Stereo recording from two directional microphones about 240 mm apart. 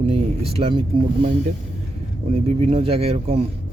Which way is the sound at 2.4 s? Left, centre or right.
Right.